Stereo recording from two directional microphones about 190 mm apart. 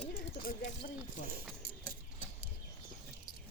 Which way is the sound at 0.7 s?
40° left (ahead or behind).